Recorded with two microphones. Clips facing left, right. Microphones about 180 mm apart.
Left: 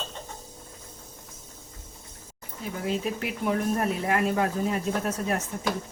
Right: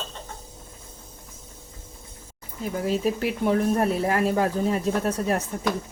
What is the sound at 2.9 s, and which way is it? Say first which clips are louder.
Speech: right 5 dB; 35° right (ahead or behind).